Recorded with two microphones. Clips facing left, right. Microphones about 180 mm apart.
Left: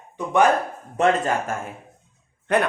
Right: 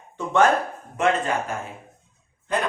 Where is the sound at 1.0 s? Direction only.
40° left (ahead or behind).